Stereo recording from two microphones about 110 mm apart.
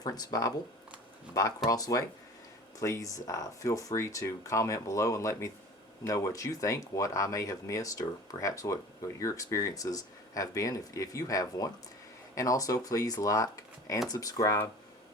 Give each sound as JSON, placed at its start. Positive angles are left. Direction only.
{"t": 0.0, "sound": "speech", "side_deg": 35}